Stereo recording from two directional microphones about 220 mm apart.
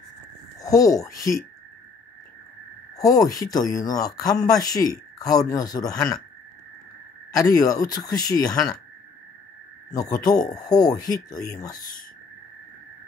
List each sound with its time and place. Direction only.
0.7 s speech: 15° left (ahead or behind)
3.0 s speech: 15° left (ahead or behind)
7.3 s speech: 15° left (ahead or behind)
9.9 s speech: 15° left (ahead or behind)